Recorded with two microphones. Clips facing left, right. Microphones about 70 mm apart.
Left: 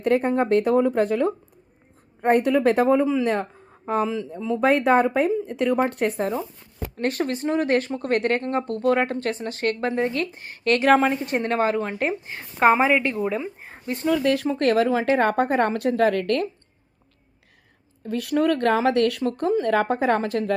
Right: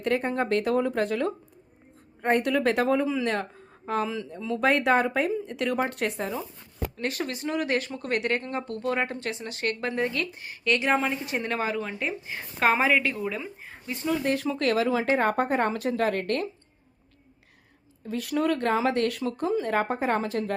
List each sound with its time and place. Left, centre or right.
0.0 s speech: left
0.6 s speech: centre
2.7 s speech: left
3.0 s speech: centre
6.0 s speech: centre
6.9 s speech: left
12.5 s speech: centre
13.7 s speech: left
14.4 s a woman's voice: left
18.0 s speech: left